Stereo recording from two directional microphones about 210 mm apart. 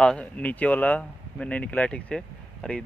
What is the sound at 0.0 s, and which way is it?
Speech, 5° left (ahead or behind).